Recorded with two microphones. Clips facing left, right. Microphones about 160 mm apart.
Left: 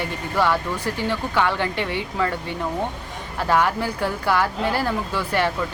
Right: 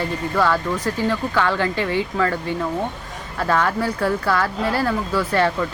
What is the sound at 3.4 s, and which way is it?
Speech, 15° left (ahead or behind).